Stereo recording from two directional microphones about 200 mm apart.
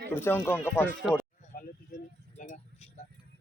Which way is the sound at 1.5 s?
45° left (ahead or behind).